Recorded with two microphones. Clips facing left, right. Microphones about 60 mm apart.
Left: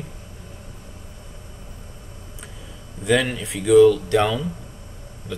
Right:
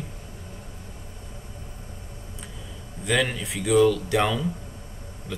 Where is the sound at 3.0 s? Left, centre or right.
Centre.